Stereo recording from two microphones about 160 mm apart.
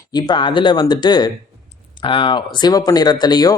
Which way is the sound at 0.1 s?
25° left (ahead or behind).